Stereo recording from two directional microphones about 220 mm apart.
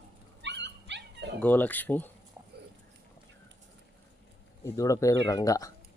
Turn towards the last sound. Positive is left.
turn(degrees=15)  # may be behind; listen again after turning